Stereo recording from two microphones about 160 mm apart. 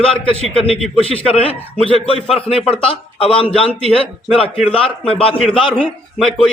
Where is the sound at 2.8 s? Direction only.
35° left (ahead or behind).